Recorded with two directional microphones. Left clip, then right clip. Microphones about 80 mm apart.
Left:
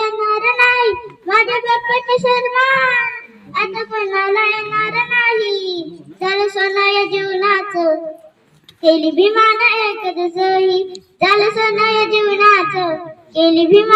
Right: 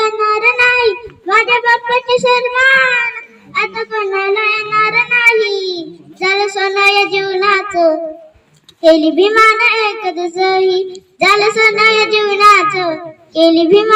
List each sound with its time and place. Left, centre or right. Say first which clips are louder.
0.0 s child singing: right 4 dB; right